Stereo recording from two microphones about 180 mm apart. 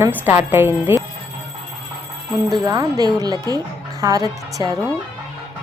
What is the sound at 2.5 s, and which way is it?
A woman's voice, 20° right (ahead or behind).